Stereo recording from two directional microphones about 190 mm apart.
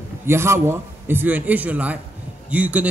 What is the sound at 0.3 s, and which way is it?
Speech, 15° right (ahead or behind).